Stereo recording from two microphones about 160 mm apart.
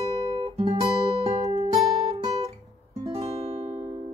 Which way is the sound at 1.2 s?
40° right (ahead or behind).